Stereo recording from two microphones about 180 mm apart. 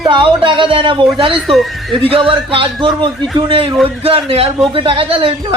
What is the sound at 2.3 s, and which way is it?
Speech, 30° right (ahead or behind).